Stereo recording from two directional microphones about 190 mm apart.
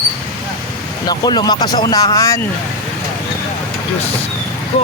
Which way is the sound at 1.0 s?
20° left (ahead or behind).